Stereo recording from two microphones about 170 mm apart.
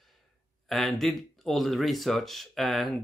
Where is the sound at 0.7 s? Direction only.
Centre (ahead or behind).